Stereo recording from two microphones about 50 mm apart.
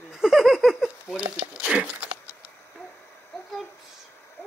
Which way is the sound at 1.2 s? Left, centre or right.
Right.